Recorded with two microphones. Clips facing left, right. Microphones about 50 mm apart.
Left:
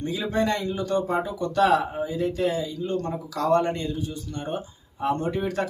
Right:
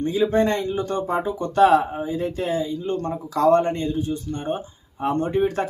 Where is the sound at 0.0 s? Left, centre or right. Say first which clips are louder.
Right 6 dB; right.